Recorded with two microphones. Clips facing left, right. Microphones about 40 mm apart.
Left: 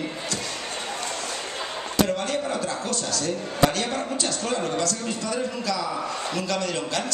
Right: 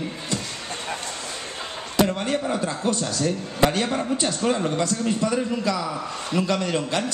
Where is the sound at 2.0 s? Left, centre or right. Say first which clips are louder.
Right 2 dB; centre.